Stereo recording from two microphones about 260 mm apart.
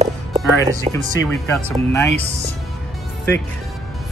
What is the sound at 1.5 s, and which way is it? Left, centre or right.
Speech, centre.